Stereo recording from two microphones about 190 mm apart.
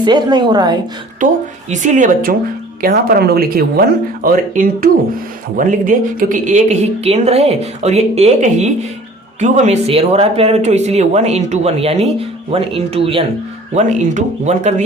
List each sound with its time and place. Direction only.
0.0 s a woman's voice: 25° right (ahead or behind)
1.7 s speech: 40° right (ahead or behind)
2.8 s speech: 50° right (ahead or behind); by 13.2 s 30° right (ahead or behind)
13.7 s speech: 40° right (ahead or behind)